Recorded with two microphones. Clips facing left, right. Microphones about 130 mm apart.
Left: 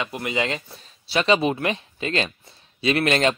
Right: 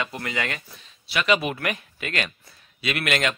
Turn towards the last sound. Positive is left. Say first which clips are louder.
# left 5 dB
turn(degrees=30)  # may be behind; listen again after turning